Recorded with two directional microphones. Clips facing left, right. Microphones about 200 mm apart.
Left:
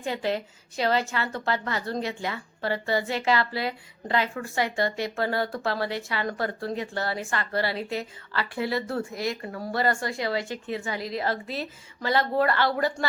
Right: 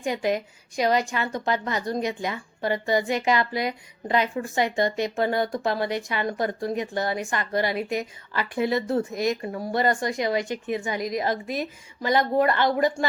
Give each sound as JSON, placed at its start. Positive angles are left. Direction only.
{"t": 0.0, "sound": "a woman's voice", "side_deg": -15}